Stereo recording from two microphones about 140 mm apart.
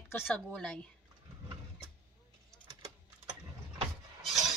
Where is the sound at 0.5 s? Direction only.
5° left (ahead or behind).